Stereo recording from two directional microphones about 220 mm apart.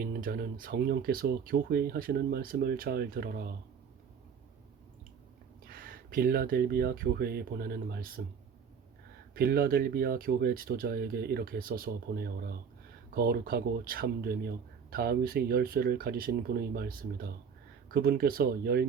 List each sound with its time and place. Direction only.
0.0 s speech: 40° right (ahead or behind)
5.6 s speech: 40° right (ahead or behind)
9.3 s speech: 45° right (ahead or behind)